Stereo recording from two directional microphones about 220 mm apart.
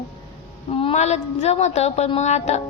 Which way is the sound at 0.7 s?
25° left (ahead or behind).